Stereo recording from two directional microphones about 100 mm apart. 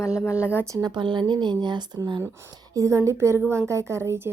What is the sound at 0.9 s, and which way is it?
Speech, 50° right (ahead or behind).